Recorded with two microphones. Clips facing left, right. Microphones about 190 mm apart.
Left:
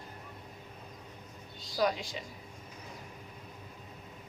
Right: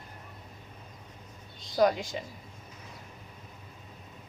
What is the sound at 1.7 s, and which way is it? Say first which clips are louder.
Speech: right 6 dB; 50° right (ahead or behind).